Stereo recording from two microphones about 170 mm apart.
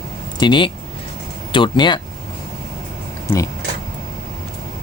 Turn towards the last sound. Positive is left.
turn(degrees=15)  # may be behind; listen again after turning